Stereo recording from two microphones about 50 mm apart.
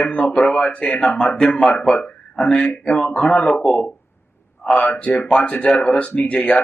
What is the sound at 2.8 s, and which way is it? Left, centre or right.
Speech, left.